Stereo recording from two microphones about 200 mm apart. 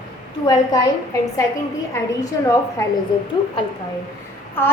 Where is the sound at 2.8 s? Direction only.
15° left (ahead or behind).